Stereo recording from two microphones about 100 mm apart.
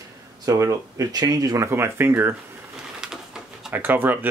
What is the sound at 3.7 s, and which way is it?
Speech, 20° right (ahead or behind).